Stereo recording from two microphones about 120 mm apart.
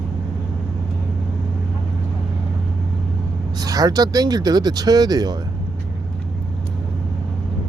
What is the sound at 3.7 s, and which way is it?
Speech, 30° right (ahead or behind).